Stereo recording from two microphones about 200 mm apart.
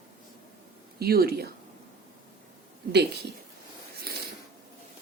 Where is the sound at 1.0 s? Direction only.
50° right (ahead or behind).